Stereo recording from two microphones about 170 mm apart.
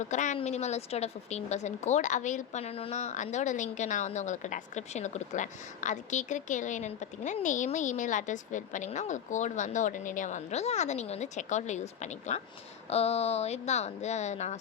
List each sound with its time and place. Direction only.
0.0 s speech: 45° left (ahead or behind)